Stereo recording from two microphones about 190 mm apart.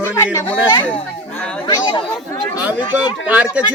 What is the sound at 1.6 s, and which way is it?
Speech, 20° left (ahead or behind).